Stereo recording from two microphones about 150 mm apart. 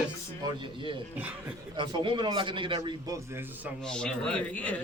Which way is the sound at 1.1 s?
10° right (ahead or behind).